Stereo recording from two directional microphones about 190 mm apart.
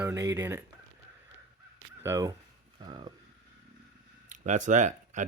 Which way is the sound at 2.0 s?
15° right (ahead or behind).